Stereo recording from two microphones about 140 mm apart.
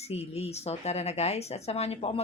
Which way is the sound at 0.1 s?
50° left (ahead or behind).